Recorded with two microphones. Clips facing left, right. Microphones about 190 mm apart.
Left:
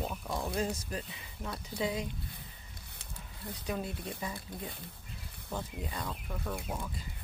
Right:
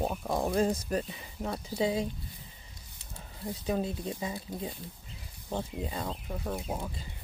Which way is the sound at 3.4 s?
25° right (ahead or behind).